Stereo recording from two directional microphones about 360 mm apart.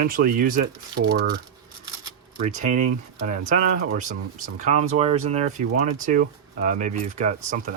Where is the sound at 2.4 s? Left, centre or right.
Right.